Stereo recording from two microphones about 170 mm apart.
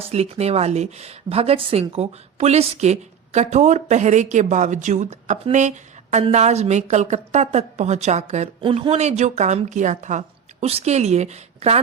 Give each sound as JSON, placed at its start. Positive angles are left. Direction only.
{"t": 0.1, "sound": "speech", "side_deg": -40}
{"t": 8.6, "sound": "a woman's voice", "side_deg": -30}